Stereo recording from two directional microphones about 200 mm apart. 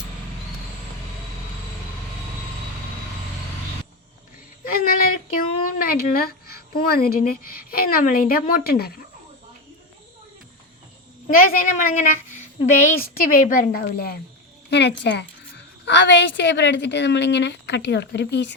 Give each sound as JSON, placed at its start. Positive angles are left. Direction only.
{"t": 4.6, "sound": "speech", "side_deg": 45}
{"t": 11.3, "sound": "a woman's voice", "side_deg": 45}
{"t": 13.2, "sound": "a woman's voice", "side_deg": 45}